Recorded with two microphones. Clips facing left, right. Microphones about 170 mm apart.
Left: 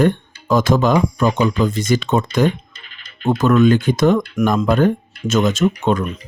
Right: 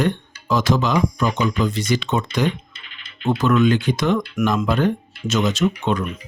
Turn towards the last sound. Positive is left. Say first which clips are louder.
# left 3 dB
turn(degrees=45)  # may be behind; listen again after turning